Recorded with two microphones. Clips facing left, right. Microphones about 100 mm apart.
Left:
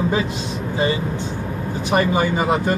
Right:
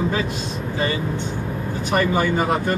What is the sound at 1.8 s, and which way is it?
Speech, 15° left (ahead or behind).